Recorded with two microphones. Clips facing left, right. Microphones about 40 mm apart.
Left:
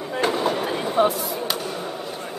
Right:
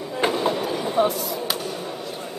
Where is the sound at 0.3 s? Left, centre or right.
Centre.